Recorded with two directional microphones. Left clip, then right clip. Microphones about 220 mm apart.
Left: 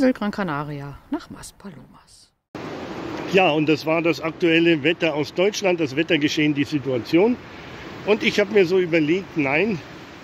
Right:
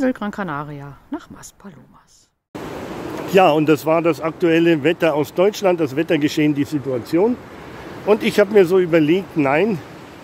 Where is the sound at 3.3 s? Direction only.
5° right (ahead or behind).